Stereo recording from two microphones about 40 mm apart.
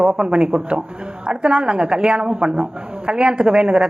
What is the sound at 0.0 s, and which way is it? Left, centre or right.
Speech, right.